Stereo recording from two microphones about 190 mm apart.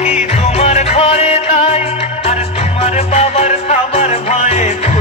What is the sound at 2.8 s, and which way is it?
Music, 35° left (ahead or behind).